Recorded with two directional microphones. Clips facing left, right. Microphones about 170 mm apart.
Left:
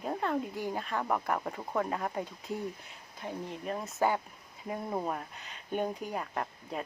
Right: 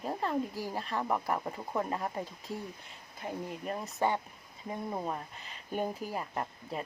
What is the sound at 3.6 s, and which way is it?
Speech, centre (ahead or behind).